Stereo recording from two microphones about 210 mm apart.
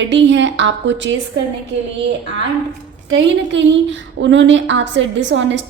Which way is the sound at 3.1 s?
60° right (ahead or behind).